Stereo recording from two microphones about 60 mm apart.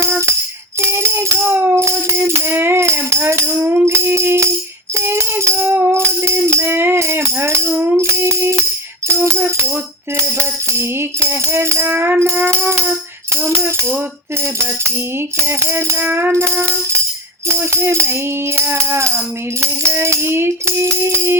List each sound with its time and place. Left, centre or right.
0.8 s music: right
1.5 s music: right
1.8 s music: right
5.5 s music: right
11.9 s music: right
12.2 s music: right